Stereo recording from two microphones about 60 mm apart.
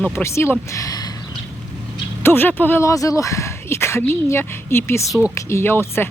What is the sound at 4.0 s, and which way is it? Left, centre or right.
Speech, left.